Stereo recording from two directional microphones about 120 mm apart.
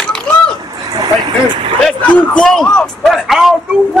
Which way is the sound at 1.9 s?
5° left (ahead or behind).